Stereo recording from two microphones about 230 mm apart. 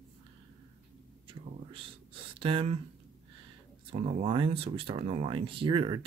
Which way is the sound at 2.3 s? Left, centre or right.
Right.